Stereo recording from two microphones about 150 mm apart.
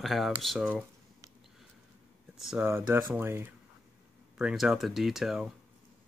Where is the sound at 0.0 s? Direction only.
Centre (ahead or behind).